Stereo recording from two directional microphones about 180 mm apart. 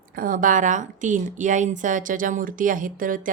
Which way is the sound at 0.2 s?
50° right (ahead or behind).